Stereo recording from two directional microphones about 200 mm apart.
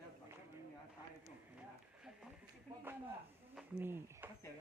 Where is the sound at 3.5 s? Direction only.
5° right (ahead or behind).